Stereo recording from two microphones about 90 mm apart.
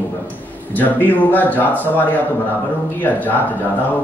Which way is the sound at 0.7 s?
20° left (ahead or behind).